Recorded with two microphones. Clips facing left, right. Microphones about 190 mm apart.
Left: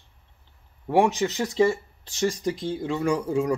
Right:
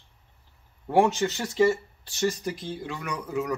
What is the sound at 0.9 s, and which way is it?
Speech, 15° left (ahead or behind).